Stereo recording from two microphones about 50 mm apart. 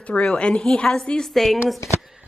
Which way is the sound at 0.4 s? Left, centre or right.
Centre.